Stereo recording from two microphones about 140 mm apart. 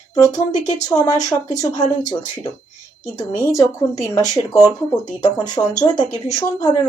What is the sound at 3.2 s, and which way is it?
Speech, 20° left (ahead or behind).